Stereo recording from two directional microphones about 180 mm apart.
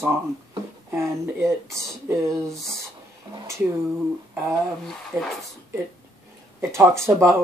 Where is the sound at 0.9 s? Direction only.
15° right (ahead or behind).